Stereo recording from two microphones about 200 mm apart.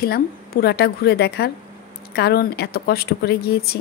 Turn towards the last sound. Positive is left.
turn(degrees=50)  # may be behind; listen again after turning